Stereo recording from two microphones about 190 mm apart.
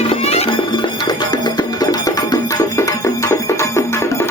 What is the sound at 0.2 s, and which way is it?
Music, 35° left (ahead or behind).